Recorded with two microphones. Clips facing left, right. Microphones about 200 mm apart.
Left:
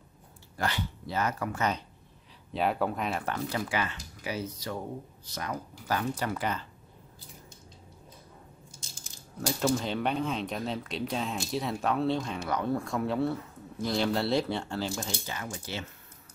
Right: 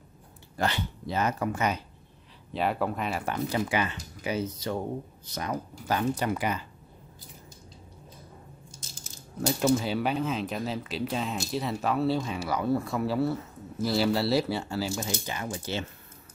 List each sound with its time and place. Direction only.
0.6 s speech: 25° right (ahead or behind)
2.5 s speech: centre (ahead or behind)
3.3 s speech: 20° right (ahead or behind)
9.6 s speech: 5° right (ahead or behind)
15.1 s speech: 15° right (ahead or behind)